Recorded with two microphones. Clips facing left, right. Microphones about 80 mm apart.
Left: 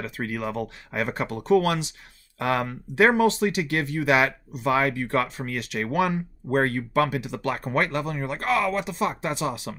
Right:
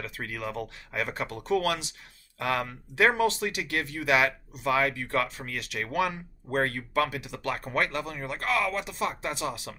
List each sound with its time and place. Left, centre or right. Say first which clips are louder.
0.0 s speech: left 5 dB; left